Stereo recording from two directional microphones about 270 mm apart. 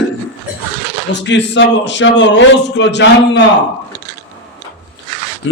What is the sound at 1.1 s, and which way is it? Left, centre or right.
A man's voice, left.